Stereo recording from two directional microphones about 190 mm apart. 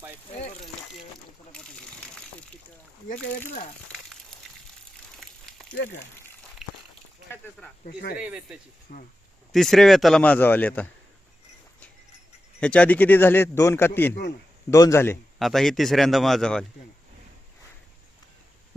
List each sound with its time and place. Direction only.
0.3 s speech: 35° left (ahead or behind)
1.5 s water: 5° left (ahead or behind)
5.2 s a sound: centre (ahead or behind)
7.9 s speech: 55° left (ahead or behind)
8.2 s speech: 5° right (ahead or behind)
8.9 s speech: 50° left (ahead or behind)
9.5 s speech: centre (ahead or behind)
12.5 s speech: 5° left (ahead or behind)
15.4 s speech: centre (ahead or behind)